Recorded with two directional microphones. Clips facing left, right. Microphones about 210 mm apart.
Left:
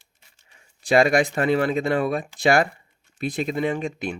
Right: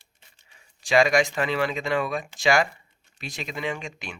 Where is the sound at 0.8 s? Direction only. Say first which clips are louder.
Left 2 dB; 55° left (ahead or behind).